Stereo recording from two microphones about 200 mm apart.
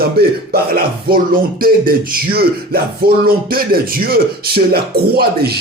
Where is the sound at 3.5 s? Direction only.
45° right (ahead or behind).